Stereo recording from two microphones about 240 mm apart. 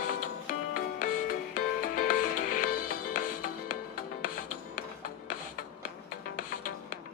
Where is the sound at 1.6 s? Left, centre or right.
Left.